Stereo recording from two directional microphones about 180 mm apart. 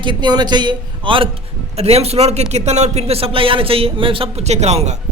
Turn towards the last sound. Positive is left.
turn(degrees=-35)  # may be behind; listen again after turning